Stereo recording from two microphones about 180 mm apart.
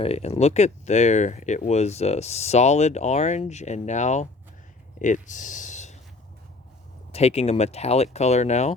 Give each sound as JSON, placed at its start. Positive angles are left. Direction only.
{"t": 0.0, "sound": "speech", "side_deg": 35}
{"t": 7.1, "sound": "speech", "side_deg": 35}